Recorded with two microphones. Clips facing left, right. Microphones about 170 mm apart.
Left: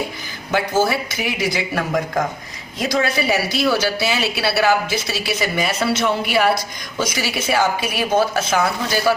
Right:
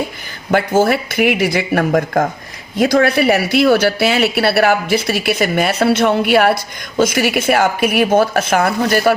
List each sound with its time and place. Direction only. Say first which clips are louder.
0.9 s a woman's voice: right 8 dB; 60° right (ahead or behind)